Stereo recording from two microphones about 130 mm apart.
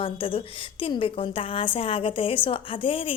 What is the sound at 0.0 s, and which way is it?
A woman's voice, 45° left (ahead or behind).